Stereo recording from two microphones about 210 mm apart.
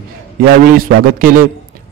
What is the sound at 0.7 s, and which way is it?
Speech, 45° right (ahead or behind).